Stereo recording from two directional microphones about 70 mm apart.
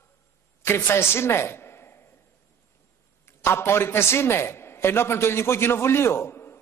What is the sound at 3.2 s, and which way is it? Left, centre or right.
A man's voice, left.